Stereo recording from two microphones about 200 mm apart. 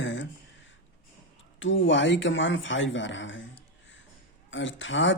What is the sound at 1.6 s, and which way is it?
Speech, 70° left (ahead or behind).